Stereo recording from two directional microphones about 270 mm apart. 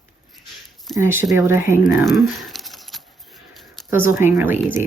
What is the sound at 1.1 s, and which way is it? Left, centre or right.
Speech, centre.